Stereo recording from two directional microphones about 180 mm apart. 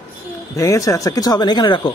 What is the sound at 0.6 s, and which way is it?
Speech, 15° left (ahead or behind).